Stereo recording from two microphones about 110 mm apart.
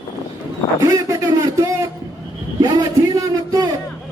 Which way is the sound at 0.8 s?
30° right (ahead or behind).